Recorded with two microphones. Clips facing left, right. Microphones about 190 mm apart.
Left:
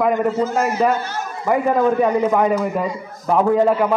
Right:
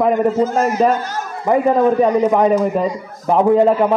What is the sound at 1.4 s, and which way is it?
A man's voice, 25° right (ahead or behind).